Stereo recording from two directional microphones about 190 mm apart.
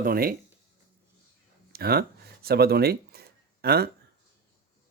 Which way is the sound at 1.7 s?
55° right (ahead or behind).